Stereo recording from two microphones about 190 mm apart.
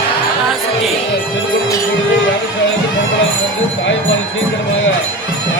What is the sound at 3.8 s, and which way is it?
Jingle bell, 85° left.